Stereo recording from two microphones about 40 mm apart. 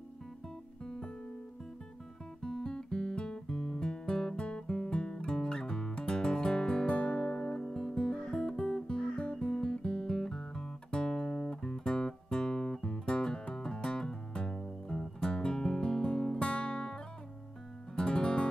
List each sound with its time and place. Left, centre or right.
0.8 s music: centre
2.4 s guitar: centre
4.5 s music: left
10.1 s guitar: centre
12.8 s music: left